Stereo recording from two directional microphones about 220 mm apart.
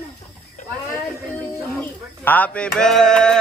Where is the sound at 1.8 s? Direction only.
10° left (ahead or behind).